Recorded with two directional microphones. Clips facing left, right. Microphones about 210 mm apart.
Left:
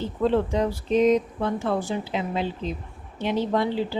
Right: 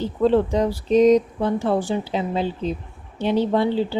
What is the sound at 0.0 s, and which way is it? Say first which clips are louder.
Speech: right 4 dB; 35° right (ahead or behind).